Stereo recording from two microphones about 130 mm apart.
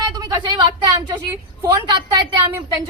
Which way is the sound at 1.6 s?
35° right (ahead or behind).